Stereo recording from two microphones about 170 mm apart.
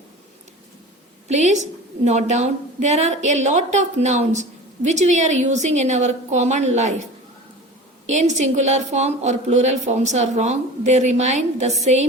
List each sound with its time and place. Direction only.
1.3 s a woman's voice: 40° right (ahead or behind)
8.0 s a woman's voice: 45° right (ahead or behind)